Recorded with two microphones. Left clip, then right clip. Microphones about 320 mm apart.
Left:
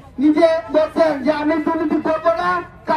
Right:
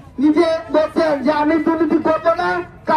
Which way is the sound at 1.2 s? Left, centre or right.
Centre.